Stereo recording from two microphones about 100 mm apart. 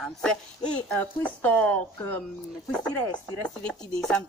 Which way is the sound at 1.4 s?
15° left (ahead or behind).